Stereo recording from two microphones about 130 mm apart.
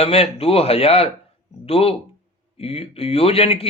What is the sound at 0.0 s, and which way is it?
A man's voice, 50° left (ahead or behind).